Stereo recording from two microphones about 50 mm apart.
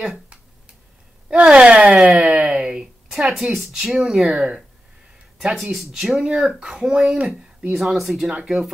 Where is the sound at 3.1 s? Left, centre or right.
Centre.